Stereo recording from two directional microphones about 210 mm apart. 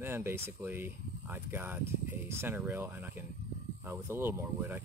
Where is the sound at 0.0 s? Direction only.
10° right (ahead or behind).